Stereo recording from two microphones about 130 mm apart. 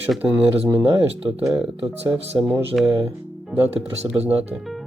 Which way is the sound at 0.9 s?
45° right (ahead or behind).